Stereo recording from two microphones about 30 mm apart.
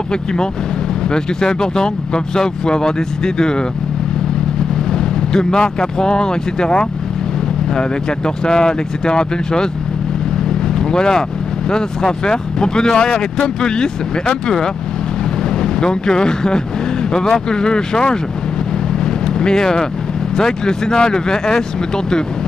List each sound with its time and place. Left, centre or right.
0.1 s speech: left
4.9 s speech: left
8.5 s speech: left
10.8 s speech: left
15.6 s speech: left
19.0 s vehicle: left
20.3 s speech: left